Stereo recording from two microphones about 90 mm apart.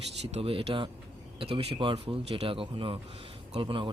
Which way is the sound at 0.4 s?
80° right.